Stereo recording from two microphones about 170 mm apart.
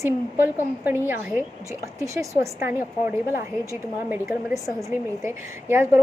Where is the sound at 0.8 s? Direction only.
10° right (ahead or behind).